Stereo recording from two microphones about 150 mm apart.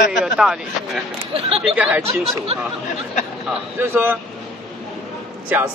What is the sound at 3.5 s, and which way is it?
Speech, 10° right (ahead or behind).